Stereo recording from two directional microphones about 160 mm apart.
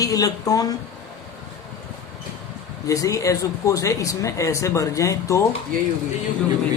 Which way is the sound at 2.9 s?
20° left (ahead or behind).